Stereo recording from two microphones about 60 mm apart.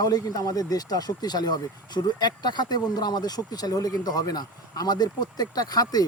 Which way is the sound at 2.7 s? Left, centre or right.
Left.